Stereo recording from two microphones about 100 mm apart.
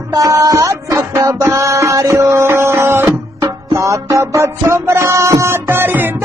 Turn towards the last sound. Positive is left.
turn(degrees=-20)  # may be behind; listen again after turning